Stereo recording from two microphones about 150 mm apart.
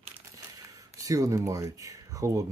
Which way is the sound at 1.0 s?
20° right (ahead or behind).